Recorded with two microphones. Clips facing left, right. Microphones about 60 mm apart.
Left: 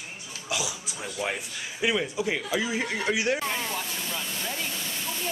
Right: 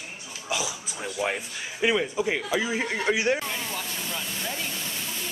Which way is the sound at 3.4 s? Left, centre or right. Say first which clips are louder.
Left 2 dB; centre.